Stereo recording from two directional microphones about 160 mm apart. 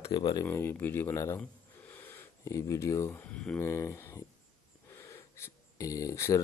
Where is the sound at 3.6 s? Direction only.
20° left (ahead or behind).